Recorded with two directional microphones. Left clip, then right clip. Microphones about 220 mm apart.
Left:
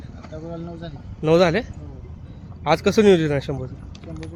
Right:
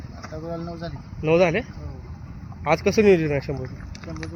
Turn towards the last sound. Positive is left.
turn(degrees=0)  # may be behind; listen again after turning